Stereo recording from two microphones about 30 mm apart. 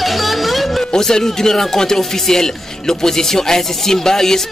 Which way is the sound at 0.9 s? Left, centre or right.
Centre.